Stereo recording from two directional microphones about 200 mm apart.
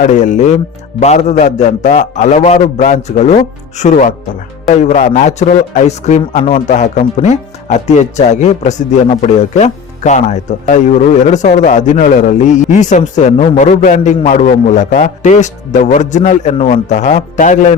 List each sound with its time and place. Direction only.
0.0 s a man's voice: 40° left (ahead or behind)